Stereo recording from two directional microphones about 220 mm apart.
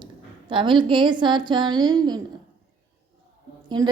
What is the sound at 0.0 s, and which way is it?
A woman's voice, 20° right (ahead or behind).